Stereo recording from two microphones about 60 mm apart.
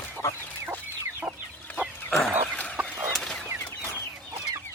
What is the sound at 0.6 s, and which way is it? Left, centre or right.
Chicken, right.